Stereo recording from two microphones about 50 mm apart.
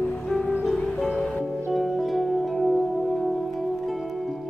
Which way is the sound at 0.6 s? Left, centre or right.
Centre.